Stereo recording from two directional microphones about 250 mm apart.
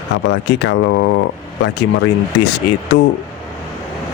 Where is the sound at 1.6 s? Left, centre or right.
Left.